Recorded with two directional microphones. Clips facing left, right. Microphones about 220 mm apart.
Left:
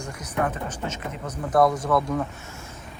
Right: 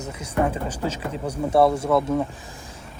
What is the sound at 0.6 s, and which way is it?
Speech, 30° right (ahead or behind).